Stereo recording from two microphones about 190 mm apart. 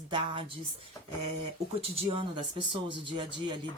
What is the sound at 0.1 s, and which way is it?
Speech, 25° right (ahead or behind).